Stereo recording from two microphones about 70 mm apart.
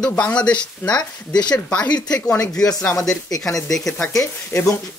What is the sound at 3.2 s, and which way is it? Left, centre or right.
Speech, left.